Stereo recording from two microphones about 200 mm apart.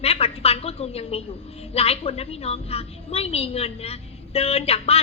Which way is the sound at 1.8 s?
30° left (ahead or behind).